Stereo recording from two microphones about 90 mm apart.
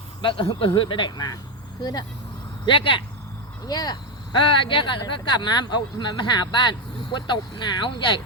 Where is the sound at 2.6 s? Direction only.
70° left (ahead or behind).